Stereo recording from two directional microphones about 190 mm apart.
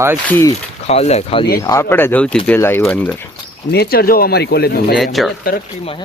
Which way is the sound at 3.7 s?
55° left (ahead or behind).